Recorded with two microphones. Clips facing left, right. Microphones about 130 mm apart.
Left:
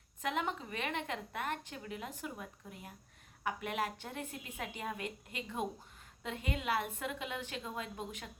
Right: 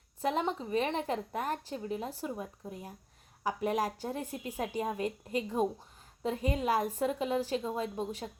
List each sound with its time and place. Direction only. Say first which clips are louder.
0.2 s a woman's voice: right 5 dB; 35° right (ahead or behind)